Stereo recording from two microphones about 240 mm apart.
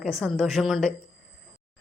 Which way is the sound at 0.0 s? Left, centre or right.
Centre.